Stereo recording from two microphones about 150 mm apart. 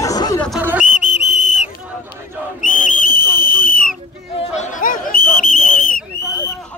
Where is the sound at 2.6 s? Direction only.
70° left (ahead or behind).